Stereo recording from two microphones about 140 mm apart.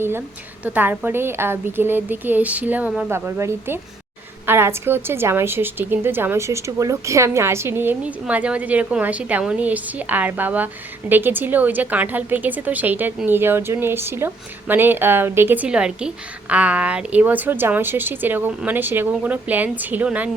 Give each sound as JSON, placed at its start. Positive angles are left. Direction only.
{"t": 0.6, "sound": "a woman's voice", "side_deg": -10}